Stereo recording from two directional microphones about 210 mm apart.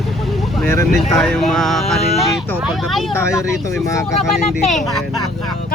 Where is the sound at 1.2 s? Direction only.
Centre (ahead or behind).